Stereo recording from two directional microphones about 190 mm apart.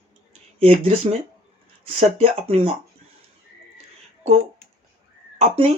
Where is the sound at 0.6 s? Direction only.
30° right (ahead or behind).